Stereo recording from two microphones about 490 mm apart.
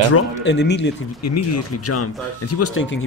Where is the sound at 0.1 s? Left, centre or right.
Left.